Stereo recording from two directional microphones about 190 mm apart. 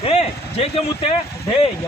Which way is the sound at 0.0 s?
30° left (ahead or behind).